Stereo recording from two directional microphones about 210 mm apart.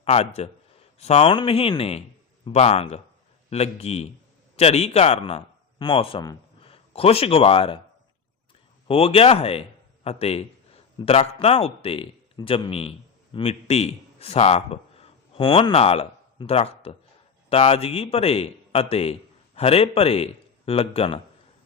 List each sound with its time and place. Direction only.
0.0 s speech: 30° left (ahead or behind)
8.9 s a man's voice: 30° left (ahead or behind)